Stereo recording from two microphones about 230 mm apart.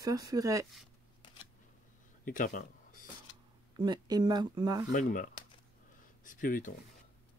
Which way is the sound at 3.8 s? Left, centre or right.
Centre.